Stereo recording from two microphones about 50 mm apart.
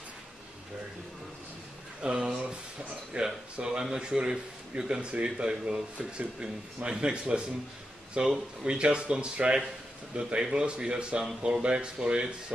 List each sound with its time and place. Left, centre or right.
2.0 s a man's voice: centre